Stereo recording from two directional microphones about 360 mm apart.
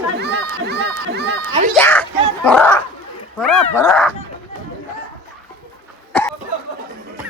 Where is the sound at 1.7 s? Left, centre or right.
Centre.